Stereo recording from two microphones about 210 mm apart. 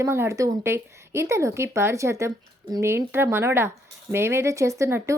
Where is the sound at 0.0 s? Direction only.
15° right (ahead or behind).